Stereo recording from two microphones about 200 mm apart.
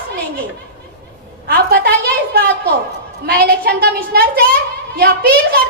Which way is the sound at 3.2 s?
50° right (ahead or behind).